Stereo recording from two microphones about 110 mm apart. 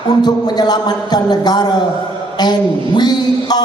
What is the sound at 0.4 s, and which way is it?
A man's voice, 40° left (ahead or behind).